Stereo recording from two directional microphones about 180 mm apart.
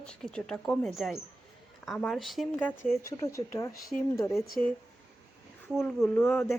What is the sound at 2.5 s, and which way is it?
A woman's voice, 15° left (ahead or behind).